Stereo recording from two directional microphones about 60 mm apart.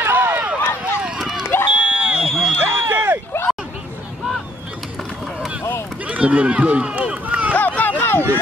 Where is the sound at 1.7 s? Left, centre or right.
Centre.